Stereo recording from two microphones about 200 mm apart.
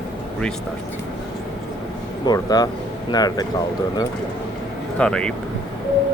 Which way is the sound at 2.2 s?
20° left (ahead or behind).